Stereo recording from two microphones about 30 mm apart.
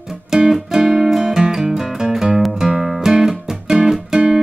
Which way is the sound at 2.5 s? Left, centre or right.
Centre.